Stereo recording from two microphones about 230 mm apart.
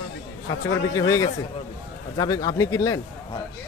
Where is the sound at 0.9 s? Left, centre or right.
Centre.